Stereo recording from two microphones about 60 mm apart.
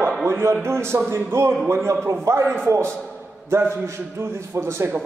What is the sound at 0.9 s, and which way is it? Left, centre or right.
Speech, right.